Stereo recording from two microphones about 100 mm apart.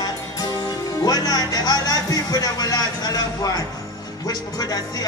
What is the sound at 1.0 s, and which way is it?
Speech, 40° left (ahead or behind).